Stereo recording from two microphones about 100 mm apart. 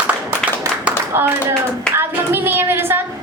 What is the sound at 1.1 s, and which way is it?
A woman's voice, 25° right (ahead or behind).